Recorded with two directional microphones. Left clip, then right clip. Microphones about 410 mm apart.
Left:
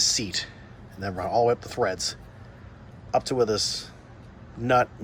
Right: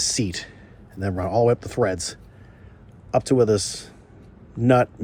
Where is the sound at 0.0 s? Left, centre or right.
Centre.